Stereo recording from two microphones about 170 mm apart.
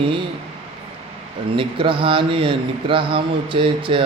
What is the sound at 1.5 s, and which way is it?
Speech, 30° right (ahead or behind).